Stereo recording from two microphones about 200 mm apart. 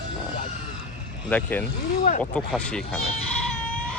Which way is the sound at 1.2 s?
5° left (ahead or behind).